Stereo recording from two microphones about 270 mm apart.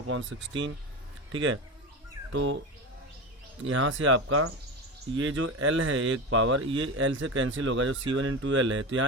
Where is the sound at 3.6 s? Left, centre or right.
Right.